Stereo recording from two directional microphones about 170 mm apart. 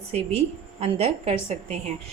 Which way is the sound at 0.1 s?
35° right (ahead or behind).